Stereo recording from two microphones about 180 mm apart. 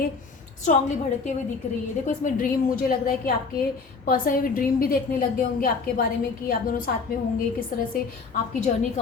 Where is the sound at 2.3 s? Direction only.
50° left (ahead or behind).